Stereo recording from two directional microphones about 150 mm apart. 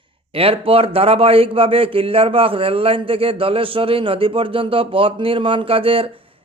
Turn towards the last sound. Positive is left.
turn(degrees=-40)  # may be behind; listen again after turning